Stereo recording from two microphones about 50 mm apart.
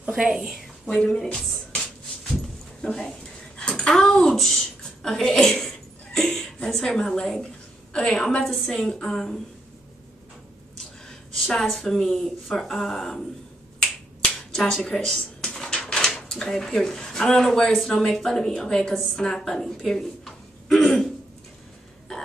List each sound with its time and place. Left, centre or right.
0.1 s a woman's voice: centre
0.8 s a woman's voice: centre
2.8 s speech: centre
3.5 s a sound: left
3.8 s a sound: centre
7.9 s a woman's voice: centre
11.3 s a woman's voice: centre
14.5 s a woman's voice: centre
19.9 s a sound: centre